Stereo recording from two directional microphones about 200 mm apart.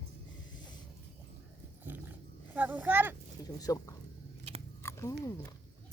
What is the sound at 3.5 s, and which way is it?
Speech, 15° left (ahead or behind).